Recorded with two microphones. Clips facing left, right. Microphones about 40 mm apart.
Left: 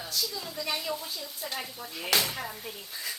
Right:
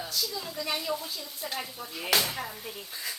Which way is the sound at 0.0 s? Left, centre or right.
Centre.